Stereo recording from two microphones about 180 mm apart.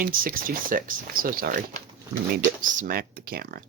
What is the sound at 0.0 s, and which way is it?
Speech, 50° right (ahead or behind).